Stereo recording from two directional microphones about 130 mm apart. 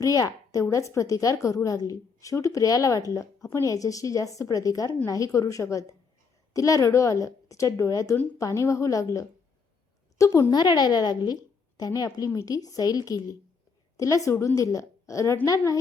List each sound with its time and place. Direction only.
0.0 s a woman's voice: 25° left (ahead or behind)
10.2 s a woman's voice: 25° left (ahead or behind)